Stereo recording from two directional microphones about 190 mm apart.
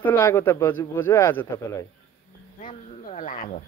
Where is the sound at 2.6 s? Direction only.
45° left (ahead or behind).